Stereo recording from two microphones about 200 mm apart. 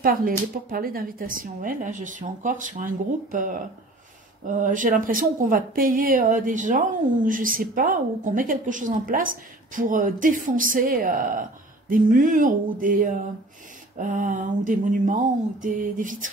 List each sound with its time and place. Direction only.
0.0 s a woman's voice: 45° right (ahead or behind)